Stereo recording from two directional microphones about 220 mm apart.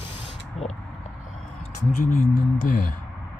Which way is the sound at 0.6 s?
Centre (ahead or behind).